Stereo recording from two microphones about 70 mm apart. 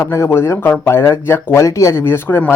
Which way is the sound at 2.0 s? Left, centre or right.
Left.